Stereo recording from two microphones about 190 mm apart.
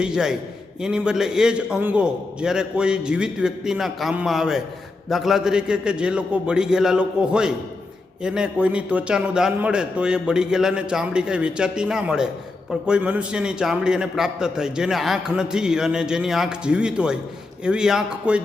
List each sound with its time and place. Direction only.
0.0 s a man's voice: 5° right (ahead or behind)